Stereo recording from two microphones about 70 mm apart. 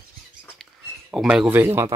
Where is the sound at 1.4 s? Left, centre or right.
Right.